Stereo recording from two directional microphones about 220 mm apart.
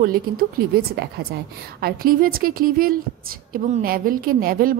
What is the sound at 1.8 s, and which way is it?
A woman's voice, 40° right (ahead or behind).